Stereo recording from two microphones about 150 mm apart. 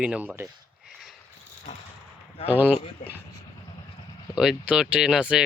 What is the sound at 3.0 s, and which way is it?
Speech, 60° left (ahead or behind).